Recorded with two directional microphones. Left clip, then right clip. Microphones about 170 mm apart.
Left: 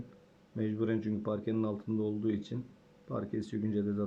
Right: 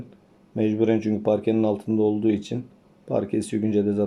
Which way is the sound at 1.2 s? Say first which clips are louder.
Right 14 dB; 90° right.